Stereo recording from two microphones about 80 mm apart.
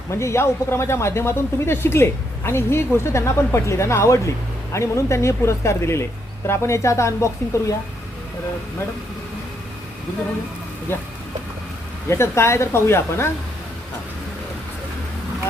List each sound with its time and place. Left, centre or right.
0.1 s speech: left
12.0 s speech: left